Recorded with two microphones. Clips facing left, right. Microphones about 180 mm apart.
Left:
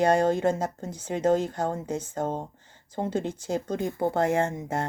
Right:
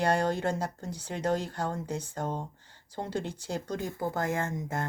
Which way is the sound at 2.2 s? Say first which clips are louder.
Left 5 dB; 50° left (ahead or behind).